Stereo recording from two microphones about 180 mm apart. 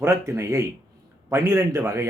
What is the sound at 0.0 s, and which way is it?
A man's voice, 15° right (ahead or behind).